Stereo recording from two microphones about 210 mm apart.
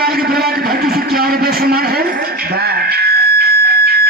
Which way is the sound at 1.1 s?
45° right (ahead or behind).